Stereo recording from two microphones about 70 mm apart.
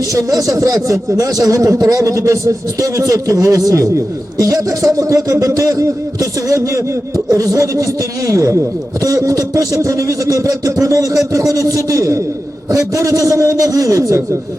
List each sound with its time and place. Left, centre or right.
0.1 s speech: right
7.3 s speech: right